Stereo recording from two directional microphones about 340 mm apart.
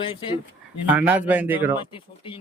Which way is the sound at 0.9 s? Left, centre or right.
Centre.